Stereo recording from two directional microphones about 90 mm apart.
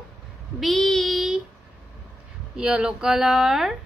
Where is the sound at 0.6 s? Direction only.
5° left (ahead or behind).